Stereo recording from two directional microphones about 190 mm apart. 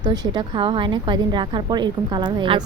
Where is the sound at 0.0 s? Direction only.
20° right (ahead or behind).